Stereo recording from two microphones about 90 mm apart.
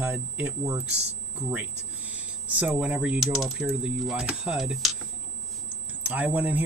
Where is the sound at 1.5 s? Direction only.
15° right (ahead or behind).